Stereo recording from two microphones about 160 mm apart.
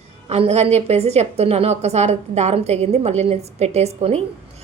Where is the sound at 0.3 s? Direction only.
40° right (ahead or behind).